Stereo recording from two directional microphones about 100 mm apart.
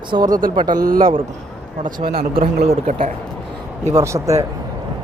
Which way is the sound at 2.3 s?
70° right (ahead or behind).